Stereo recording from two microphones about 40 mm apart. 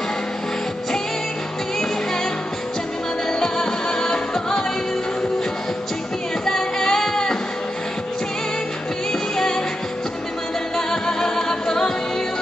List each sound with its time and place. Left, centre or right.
3.3 s music: centre
6.4 s music: centre
10.9 s music: centre